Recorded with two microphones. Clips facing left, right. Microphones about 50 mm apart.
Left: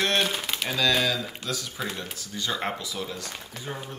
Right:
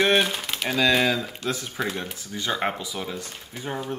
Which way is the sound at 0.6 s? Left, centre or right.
Centre.